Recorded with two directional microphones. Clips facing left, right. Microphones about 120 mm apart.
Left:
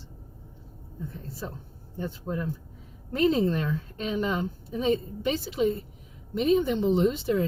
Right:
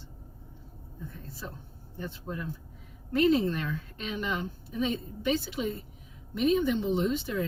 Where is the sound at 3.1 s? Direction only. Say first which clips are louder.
Left 1 dB; 35° left (ahead or behind).